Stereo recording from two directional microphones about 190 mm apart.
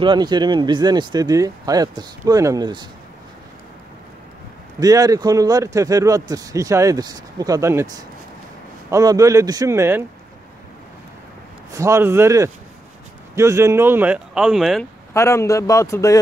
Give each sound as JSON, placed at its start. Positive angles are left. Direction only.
{"t": 0.0, "sound": "a man's voice", "side_deg": -25}
{"t": 4.7, "sound": "a man's voice", "side_deg": -20}
{"t": 11.7, "sound": "speech", "side_deg": -15}
{"t": 15.1, "sound": "a man's voice", "side_deg": 15}